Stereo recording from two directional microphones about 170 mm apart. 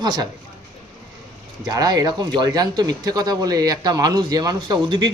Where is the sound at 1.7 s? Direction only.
20° right (ahead or behind).